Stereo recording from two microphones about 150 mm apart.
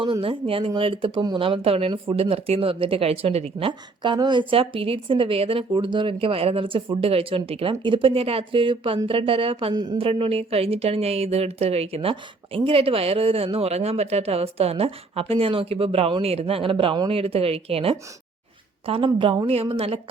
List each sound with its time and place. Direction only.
0.0 s speech: 35° right (ahead or behind)
10.1 s speech: 40° right (ahead or behind)